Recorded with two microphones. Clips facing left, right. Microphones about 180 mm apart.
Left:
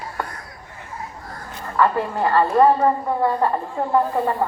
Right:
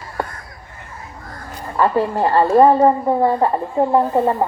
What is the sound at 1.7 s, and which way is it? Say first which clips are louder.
Speech: right 3 dB; 25° right (ahead or behind).